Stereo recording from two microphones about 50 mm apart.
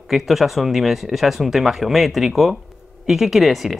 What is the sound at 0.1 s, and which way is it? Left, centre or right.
Speech, centre.